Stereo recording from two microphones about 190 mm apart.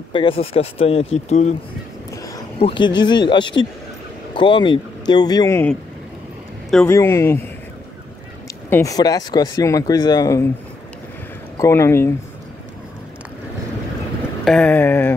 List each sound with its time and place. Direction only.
0.1 s speech: 25° left (ahead or behind)
2.6 s speech: 25° left (ahead or behind); by 7.0 s 5° left (ahead or behind)
7.0 s a sound: 15° left (ahead or behind)
8.6 s speech: 15° left (ahead or behind)
11.5 s speech: 15° left (ahead or behind)
14.4 s a sound: 5° left (ahead or behind)